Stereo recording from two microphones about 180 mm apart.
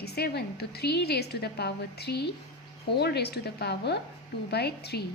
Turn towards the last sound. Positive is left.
turn(degrees=65)  # may be behind; listen again after turning